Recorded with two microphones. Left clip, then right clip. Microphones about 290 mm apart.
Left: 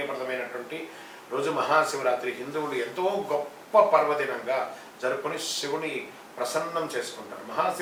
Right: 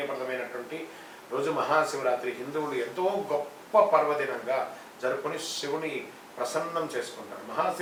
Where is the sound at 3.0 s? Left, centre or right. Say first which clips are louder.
Left 1 dB; right.